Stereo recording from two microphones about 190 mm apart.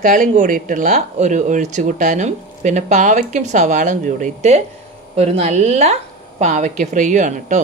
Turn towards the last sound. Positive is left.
turn(degrees=-40)  # may be behind; listen again after turning